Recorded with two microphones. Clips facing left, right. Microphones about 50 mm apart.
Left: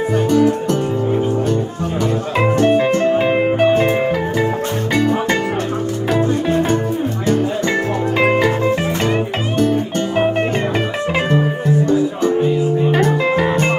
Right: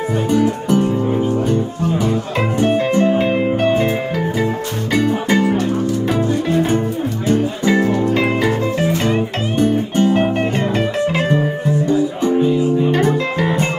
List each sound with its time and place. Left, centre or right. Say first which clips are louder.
0.3 s music: even; centre
2.6 s music: right 1 dB; centre
3.3 s music: left 2 dB; centre
4.9 s music: right 1 dB; centre
6.1 s music: left 4 dB; left
7.2 s music: right 2 dB; centre
9.6 s music: right 2 dB; centre
13.4 s music: left 1 dB; centre